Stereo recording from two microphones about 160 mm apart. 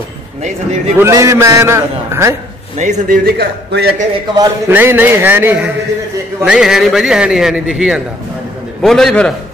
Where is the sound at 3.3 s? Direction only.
80° right.